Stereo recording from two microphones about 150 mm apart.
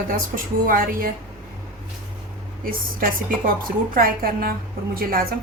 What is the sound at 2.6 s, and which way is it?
A woman's voice, 70° right (ahead or behind).